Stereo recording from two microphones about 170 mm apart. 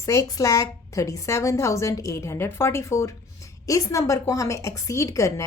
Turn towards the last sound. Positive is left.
turn(degrees=20)  # may be behind; listen again after turning